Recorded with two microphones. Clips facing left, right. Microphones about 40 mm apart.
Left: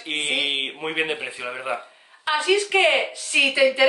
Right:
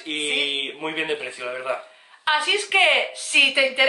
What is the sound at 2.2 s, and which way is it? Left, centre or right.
A woman's voice, centre.